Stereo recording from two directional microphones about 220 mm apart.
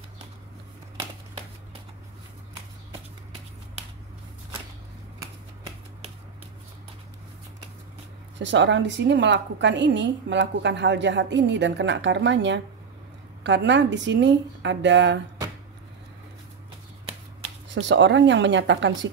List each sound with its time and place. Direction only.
8.4 s a woman's voice: 55° right (ahead or behind)
17.7 s speech: 55° right (ahead or behind)